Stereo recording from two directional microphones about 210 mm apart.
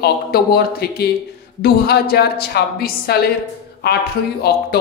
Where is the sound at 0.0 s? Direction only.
50° left (ahead or behind).